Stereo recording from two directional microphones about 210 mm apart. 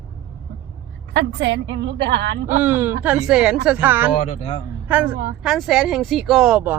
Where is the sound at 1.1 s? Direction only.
55° right (ahead or behind).